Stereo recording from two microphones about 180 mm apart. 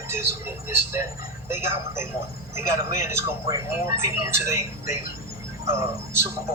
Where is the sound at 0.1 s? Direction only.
15° right (ahead or behind).